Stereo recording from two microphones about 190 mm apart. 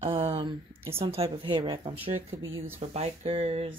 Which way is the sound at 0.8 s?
15° right (ahead or behind).